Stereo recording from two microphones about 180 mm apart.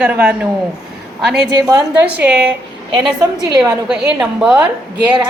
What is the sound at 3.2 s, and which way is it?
Speech, 20° right (ahead or behind).